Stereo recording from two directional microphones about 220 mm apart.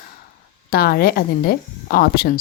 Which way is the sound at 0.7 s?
45° left (ahead or behind).